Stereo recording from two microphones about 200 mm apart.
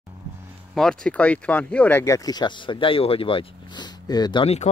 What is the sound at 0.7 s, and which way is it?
Speech, 5° left (ahead or behind).